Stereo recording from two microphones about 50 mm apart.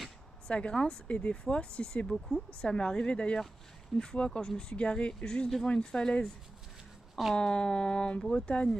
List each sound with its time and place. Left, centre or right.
0.5 s speech: left
2.0 s speech: centre
2.6 s speech: centre
7.3 s speech: centre